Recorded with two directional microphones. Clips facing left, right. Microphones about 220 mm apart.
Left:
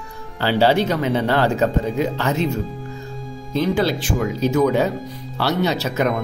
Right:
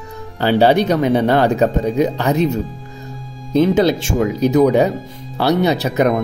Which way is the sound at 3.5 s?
20° right (ahead or behind).